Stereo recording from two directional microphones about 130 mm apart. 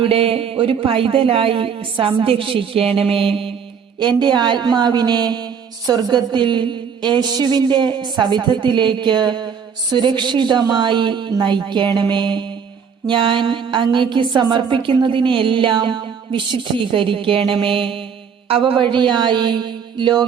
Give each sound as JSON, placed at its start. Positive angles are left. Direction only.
{"t": 0.0, "sound": "a woman's voice", "side_deg": -45}